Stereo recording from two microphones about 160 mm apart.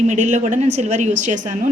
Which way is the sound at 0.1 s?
45° right (ahead or behind).